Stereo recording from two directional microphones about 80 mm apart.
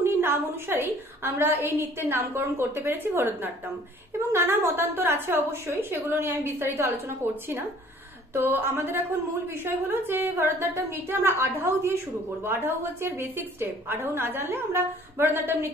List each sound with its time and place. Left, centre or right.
0.0 s a woman's voice: right